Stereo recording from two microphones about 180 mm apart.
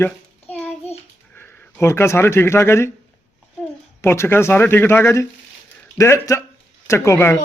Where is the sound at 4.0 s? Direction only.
15° left (ahead or behind).